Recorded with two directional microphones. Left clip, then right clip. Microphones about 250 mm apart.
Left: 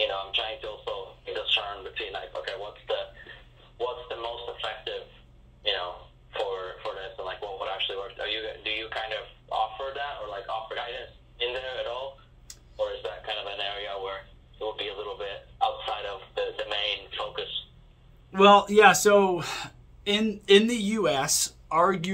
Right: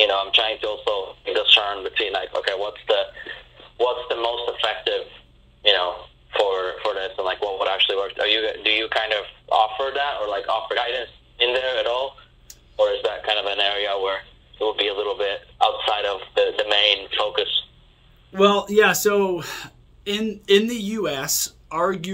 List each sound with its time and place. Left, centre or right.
0.0 s radio: right
18.3 s speech: centre